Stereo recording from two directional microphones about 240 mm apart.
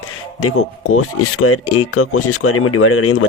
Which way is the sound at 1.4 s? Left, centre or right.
Left.